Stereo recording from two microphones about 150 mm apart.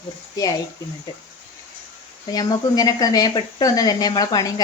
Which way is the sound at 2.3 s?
25° left (ahead or behind).